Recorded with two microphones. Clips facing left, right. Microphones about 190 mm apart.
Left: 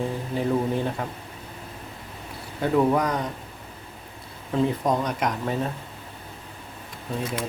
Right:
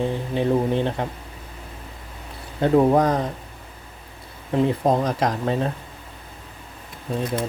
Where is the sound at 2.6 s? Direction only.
25° right (ahead or behind).